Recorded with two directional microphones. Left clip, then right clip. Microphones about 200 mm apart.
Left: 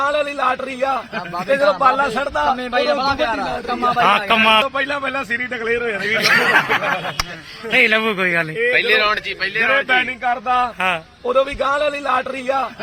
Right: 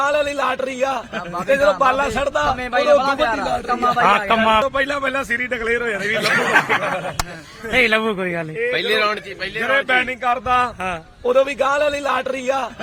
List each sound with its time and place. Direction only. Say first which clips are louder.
0.0 s a man's voice: even; 25° right (ahead or behind)
2.7 s a man's voice: right 5 dB; 40° left (ahead or behind)
4.0 s a man's voice: left 2 dB; 5° right (ahead or behind)
8.7 s a man's voice: left 3 dB; 60° right (ahead or behind)
9.4 s a man's voice: left 1 dB; 15° right (ahead or behind)